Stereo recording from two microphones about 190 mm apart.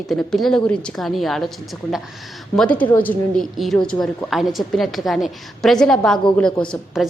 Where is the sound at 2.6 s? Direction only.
5° left (ahead or behind).